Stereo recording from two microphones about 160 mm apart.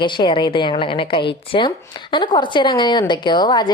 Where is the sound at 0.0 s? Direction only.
30° left (ahead or behind).